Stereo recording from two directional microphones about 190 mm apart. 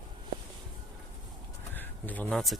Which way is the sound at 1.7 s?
10° left (ahead or behind).